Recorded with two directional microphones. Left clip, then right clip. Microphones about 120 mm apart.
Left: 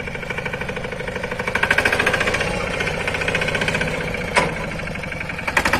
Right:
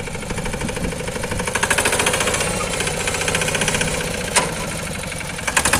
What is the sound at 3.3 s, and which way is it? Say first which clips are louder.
Vehicle: right 1 dB; 40° right (ahead or behind).